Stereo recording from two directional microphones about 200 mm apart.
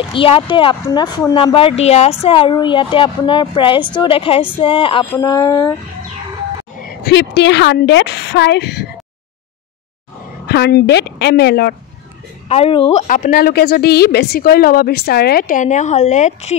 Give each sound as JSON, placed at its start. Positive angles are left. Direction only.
{"t": 0.1, "sound": "a woman's voice", "side_deg": 25}
{"t": 6.8, "sound": "a woman's voice", "side_deg": 50}
{"t": 10.4, "sound": "a woman's voice", "side_deg": 55}
{"t": 12.4, "sound": "a woman's voice", "side_deg": 30}
{"t": 13.0, "sound": "a woman's voice", "side_deg": 40}